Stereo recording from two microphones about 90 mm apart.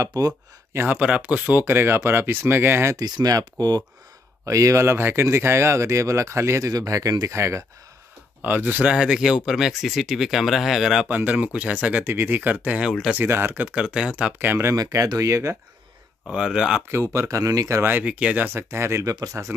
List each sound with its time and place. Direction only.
0.0 s speech: 45° right (ahead or behind)
0.7 s speech: 15° right (ahead or behind)
1.6 s speech: 25° right (ahead or behind)
2.9 s speech: 45° right (ahead or behind)
8.4 s speech: 20° right (ahead or behind); by 11.1 s 5° right (ahead or behind)
11.1 s speech: 15° right (ahead or behind)
13.7 s speech: 10° right (ahead or behind); by 14.8 s 25° right (ahead or behind)
14.8 s speech: 40° right (ahead or behind)
16.3 s speech: 10° right (ahead or behind)
17.0 s speech: 35° right (ahead or behind)
17.9 s speech: 15° right (ahead or behind); by 19.5 s 30° right (ahead or behind)